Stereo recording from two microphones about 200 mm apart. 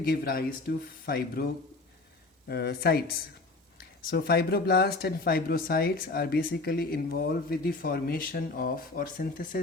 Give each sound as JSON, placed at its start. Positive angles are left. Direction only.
{"t": 0.0, "sound": "speech", "side_deg": 50}
{"t": 2.5, "sound": "speech", "side_deg": 55}